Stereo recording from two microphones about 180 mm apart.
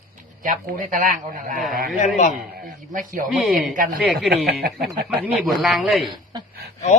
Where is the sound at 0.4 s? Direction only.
50° right (ahead or behind).